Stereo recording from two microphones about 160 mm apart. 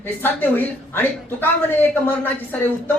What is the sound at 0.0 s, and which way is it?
A woman's voice, 15° left (ahead or behind).